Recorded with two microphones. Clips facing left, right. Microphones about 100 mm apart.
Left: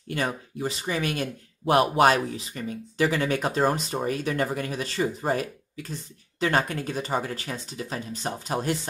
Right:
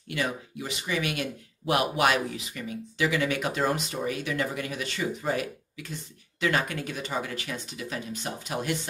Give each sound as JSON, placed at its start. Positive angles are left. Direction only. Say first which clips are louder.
{"t": 0.1, "sound": "speech", "louder": "left 2 dB", "side_deg": 40}